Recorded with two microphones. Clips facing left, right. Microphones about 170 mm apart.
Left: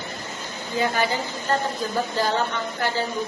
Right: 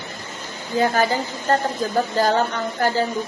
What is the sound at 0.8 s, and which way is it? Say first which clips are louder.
Speech: right 4 dB; 40° right (ahead or behind).